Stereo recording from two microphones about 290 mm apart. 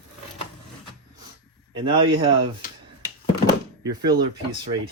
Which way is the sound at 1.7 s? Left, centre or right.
Centre.